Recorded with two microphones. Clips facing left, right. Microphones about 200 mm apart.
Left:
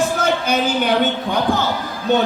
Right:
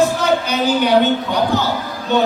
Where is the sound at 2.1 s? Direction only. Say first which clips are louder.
Even; 50° left (ahead or behind).